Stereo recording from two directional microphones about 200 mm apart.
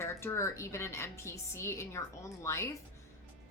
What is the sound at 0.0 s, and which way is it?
Speech, 15° left (ahead or behind).